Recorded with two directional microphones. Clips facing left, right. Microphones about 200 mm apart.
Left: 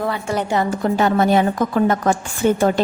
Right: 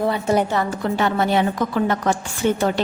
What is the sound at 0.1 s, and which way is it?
Speech, 20° right (ahead or behind).